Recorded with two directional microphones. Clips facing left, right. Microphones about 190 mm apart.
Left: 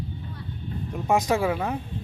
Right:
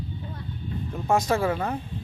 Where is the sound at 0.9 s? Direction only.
15° left (ahead or behind).